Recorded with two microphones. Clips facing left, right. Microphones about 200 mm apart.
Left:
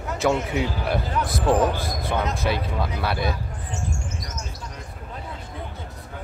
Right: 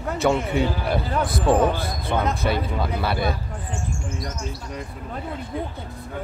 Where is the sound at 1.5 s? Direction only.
55° right (ahead or behind).